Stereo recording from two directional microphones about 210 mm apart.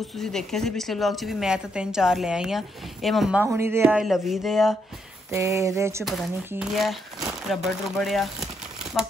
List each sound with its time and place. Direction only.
0.1 s speech: centre (ahead or behind)
5.3 s a sound: 15° right (ahead or behind)
6.0 s speech: centre (ahead or behind)